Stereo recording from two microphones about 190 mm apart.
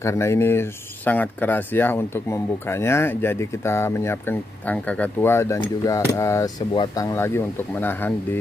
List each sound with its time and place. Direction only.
0.0 s speech: 15° left (ahead or behind)